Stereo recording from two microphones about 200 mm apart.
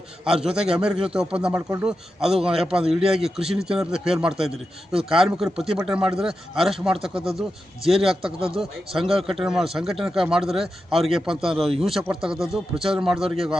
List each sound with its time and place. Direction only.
0.3 s speech: 5° right (ahead or behind)